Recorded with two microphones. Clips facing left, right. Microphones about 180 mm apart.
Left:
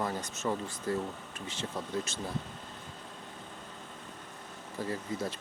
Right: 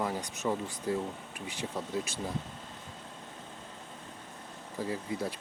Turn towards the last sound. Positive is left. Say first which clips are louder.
# right 1 dB
turn(degrees=-10)  # may be behind; listen again after turning